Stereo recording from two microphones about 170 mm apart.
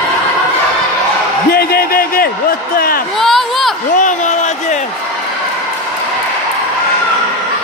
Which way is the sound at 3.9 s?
45° left (ahead or behind).